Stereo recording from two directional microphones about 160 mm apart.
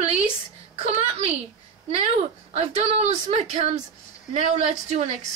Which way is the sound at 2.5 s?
40° right (ahead or behind).